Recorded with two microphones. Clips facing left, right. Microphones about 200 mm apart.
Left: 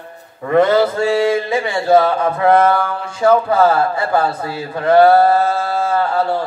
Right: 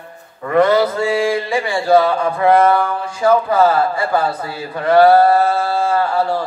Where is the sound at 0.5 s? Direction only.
25° left (ahead or behind).